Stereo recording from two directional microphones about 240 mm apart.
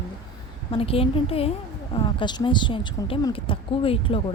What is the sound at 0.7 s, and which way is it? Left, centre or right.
Speech, left.